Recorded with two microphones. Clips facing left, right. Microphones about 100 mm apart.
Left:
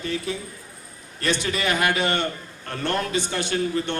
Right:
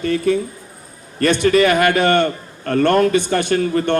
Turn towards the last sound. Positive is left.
turn(degrees=-55)  # may be behind; listen again after turning